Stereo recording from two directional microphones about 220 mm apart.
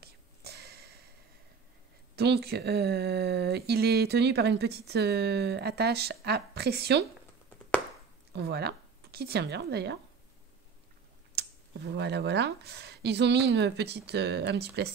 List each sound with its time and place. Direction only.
0.0 s a sound: 45° right (ahead or behind)
2.1 s speech: 50° right (ahead or behind)
8.3 s speech: 50° right (ahead or behind)
11.3 s speech: 50° right (ahead or behind)